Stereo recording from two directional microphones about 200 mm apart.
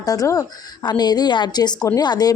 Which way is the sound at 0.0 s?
15° left (ahead or behind).